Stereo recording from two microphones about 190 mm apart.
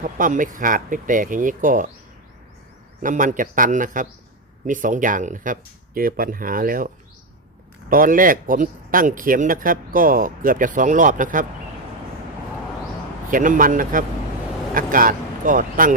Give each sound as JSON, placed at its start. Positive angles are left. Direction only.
{"t": 0.2, "sound": "speech", "side_deg": -45}
{"t": 3.0, "sound": "speech", "side_deg": -45}
{"t": 13.3, "sound": "speech", "side_deg": -45}